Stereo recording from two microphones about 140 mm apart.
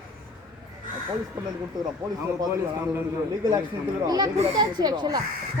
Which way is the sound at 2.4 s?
20° right (ahead or behind).